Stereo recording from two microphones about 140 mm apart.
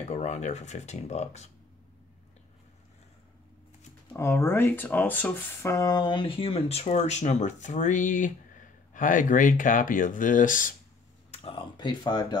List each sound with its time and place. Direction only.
0.1 s speech: 55° left (ahead or behind)
4.2 s speech: 15° left (ahead or behind); by 10.7 s 75° left (ahead or behind)
11.3 s speech: 40° left (ahead or behind)